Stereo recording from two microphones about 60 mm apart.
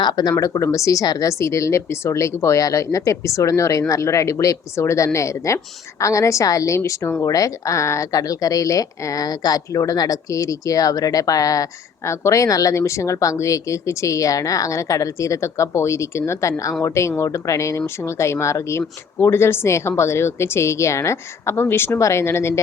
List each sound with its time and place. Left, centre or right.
0.3 s speech: left